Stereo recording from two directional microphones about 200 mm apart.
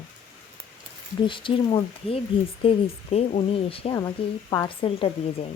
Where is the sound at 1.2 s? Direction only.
25° left (ahead or behind).